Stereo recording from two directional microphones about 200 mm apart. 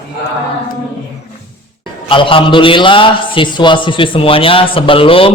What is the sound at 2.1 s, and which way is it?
A man's voice, 25° left (ahead or behind).